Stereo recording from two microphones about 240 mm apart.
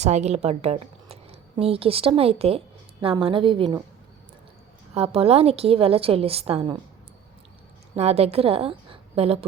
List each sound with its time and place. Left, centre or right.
0.0 s a woman's voice: right
4.9 s a woman's voice: right
7.9 s a woman's voice: right